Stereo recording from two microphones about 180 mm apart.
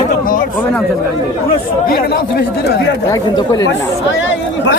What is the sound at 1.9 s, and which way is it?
Speech, 65° left (ahead or behind).